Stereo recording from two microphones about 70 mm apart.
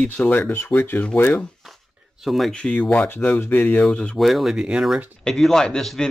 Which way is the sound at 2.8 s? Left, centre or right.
Left.